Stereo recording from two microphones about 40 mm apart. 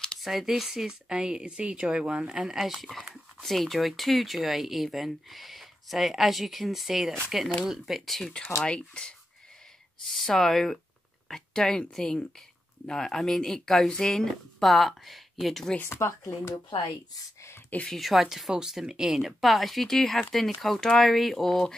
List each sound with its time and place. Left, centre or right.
0.2 s speech: centre
1.0 s a woman's voice: right
2.5 s speech: centre
8.6 s speech: left
10.1 s speech: centre
15.8 s speech: left
17.9 s speech: centre
19.4 s speech: centre
21.5 s speech: centre